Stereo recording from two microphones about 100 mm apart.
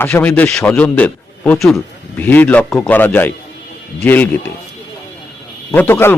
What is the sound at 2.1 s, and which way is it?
Speech, 20° left (ahead or behind).